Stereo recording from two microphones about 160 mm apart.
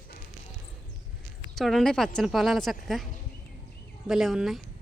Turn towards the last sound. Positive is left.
turn(degrees=0)  # may be behind; listen again after turning